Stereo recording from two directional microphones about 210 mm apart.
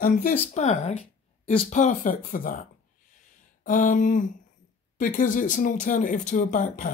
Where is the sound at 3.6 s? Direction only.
40° left (ahead or behind).